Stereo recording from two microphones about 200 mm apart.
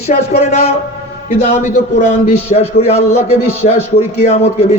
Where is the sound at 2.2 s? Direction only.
35° left (ahead or behind).